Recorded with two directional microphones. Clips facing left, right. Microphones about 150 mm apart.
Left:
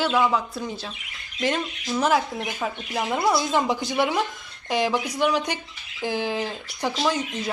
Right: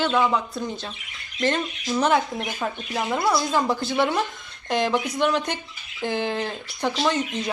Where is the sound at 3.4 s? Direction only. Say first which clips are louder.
Even; 15° left (ahead or behind).